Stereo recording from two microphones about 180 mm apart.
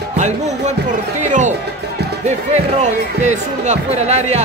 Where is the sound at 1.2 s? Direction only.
40° right (ahead or behind).